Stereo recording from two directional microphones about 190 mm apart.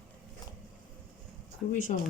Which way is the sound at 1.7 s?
45° left (ahead or behind).